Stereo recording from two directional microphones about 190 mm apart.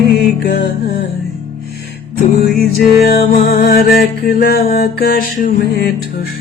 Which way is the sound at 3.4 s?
50° left (ahead or behind).